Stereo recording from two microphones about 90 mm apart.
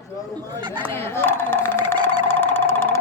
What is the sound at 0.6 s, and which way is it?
Speech, 50° right (ahead or behind).